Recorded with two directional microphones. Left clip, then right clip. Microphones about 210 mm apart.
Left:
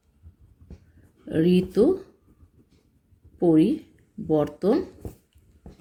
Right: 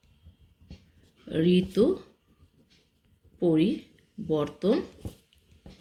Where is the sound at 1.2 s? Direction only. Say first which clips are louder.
Left 3 dB; 45° left (ahead or behind).